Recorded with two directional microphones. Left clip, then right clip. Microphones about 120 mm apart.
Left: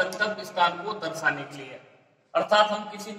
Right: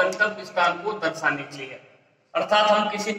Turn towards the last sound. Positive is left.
turn(degrees=-25)  # may be behind; listen again after turning